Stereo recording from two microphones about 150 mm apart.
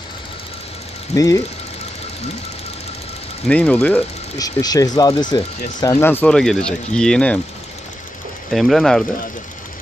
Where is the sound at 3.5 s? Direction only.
10° left (ahead or behind).